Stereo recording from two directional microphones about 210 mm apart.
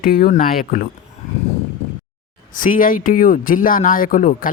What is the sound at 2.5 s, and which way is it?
Speech, 40° left (ahead or behind).